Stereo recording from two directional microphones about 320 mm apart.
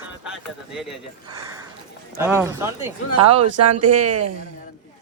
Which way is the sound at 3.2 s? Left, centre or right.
Right.